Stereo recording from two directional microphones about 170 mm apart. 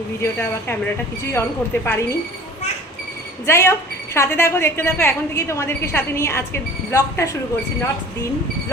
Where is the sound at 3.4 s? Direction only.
15° left (ahead or behind).